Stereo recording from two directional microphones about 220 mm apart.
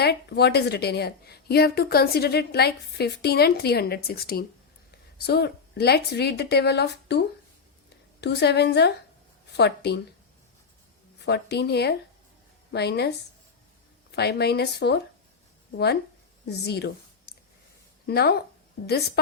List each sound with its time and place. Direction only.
0.0 s a woman's voice: 45° left (ahead or behind)
8.2 s a woman's voice: 50° left (ahead or behind)
11.2 s a woman's voice: 50° left (ahead or behind)
14.2 s a woman's voice: 45° left (ahead or behind)
16.5 s a woman's voice: 50° left (ahead or behind)
18.0 s a woman's voice: 45° left (ahead or behind)